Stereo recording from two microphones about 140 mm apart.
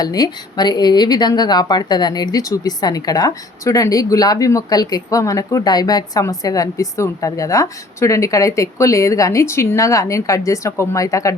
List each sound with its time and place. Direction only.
0.0 s speech: 30° left (ahead or behind)